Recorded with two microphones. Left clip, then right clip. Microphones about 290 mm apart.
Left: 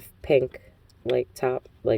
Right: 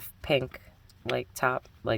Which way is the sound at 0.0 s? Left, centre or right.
Centre.